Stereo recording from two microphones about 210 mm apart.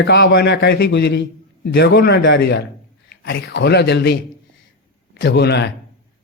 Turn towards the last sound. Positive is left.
turn(degrees=50)  # may be behind; listen again after turning